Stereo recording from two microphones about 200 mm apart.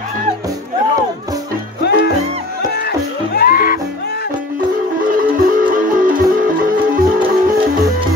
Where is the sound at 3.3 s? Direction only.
45° left (ahead or behind).